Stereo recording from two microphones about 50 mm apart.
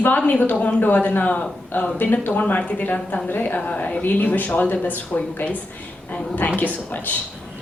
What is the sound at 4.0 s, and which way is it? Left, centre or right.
Speech, left.